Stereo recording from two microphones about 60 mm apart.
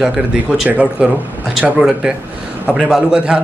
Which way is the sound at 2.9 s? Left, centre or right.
Centre.